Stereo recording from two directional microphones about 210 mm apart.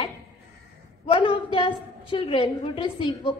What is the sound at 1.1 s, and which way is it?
A woman's voice, 25° left (ahead or behind).